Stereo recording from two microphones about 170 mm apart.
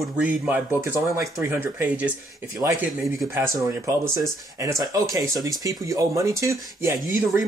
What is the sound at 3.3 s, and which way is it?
Speech, 15° right (ahead or behind).